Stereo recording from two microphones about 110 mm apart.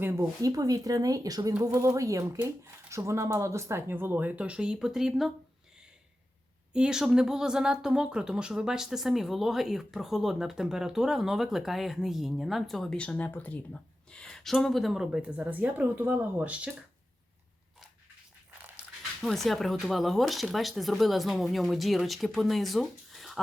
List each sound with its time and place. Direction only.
0.0 s speech: 20° right (ahead or behind)
0.4 s speech: 35° right (ahead or behind); by 5.3 s 5° right (ahead or behind)
6.7 s a woman's voice: 5° right (ahead or behind)
19.2 s speech: centre (ahead or behind)